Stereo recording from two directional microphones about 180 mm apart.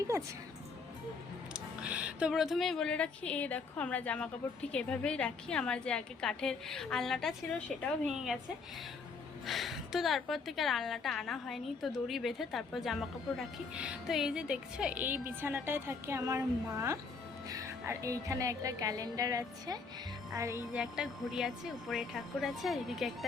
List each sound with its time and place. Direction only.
0.1 s music: 15° right (ahead or behind)
1.5 s a woman's voice: 5° right (ahead or behind)
9.5 s a woman's voice: centre (ahead or behind); by 19.8 s 20° right (ahead or behind)
20.3 s music: 15° right (ahead or behind)
20.7 s a woman's voice: 5° right (ahead or behind)